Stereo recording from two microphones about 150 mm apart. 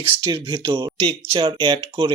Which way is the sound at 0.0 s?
35° right (ahead or behind).